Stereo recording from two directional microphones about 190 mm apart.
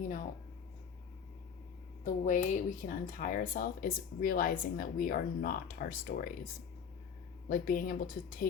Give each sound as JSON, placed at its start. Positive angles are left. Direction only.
{"t": 2.0, "sound": "speech", "side_deg": 40}